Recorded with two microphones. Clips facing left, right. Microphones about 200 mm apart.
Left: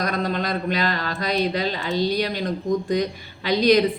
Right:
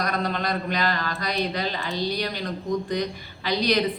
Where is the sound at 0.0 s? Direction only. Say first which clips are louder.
Left 2 dB; 45° left (ahead or behind).